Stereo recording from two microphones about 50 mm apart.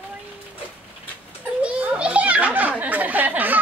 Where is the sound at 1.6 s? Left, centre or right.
Right.